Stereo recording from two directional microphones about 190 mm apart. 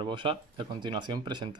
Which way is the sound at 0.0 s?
25° right (ahead or behind).